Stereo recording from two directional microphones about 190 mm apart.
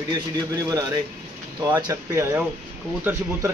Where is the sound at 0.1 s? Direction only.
20° right (ahead or behind).